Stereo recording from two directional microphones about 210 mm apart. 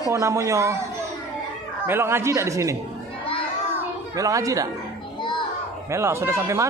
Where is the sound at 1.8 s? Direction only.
10° right (ahead or behind).